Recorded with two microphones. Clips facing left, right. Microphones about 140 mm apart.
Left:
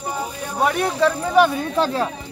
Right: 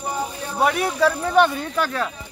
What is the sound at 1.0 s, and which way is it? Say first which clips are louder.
Speech: left 1 dB; centre (ahead or behind).